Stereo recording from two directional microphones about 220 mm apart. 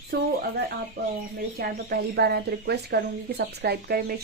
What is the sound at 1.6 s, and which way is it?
Speech, 45° right (ahead or behind).